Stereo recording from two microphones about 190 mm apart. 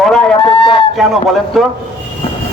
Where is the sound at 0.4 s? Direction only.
25° left (ahead or behind).